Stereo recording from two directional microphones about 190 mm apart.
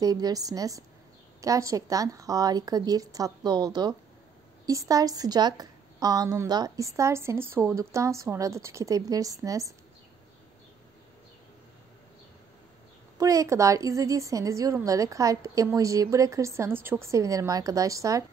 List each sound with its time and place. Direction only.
0.0 s a woman's voice: 20° right (ahead or behind)
13.2 s a woman's voice: 15° right (ahead or behind)